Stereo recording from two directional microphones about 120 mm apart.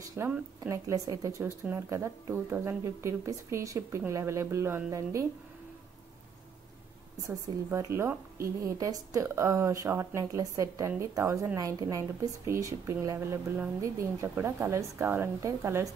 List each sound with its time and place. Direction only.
0.0 s a sound: 25° right (ahead or behind)
0.7 s speech: 30° right (ahead or behind)
1.4 s speech: 15° right (ahead or behind)
7.2 s speech: 25° right (ahead or behind)